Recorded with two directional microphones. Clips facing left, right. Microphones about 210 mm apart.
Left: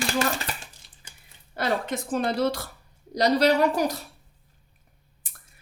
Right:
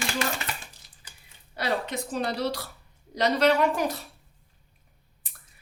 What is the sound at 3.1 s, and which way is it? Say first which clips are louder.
Speech: left 2 dB; 40° left (ahead or behind).